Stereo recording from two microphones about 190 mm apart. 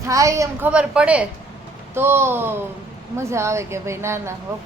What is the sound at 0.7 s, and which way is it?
A woman's voice, 5° right (ahead or behind).